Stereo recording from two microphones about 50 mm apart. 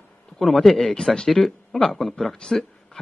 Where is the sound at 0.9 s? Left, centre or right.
Centre.